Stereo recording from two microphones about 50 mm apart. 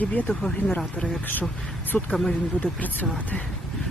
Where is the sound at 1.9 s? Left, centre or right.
Left.